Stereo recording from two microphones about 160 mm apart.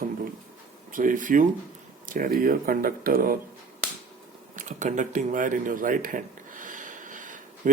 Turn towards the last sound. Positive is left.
turn(degrees=-55)  # may be behind; listen again after turning